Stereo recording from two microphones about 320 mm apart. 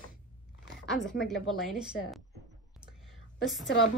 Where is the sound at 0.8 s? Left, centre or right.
Centre.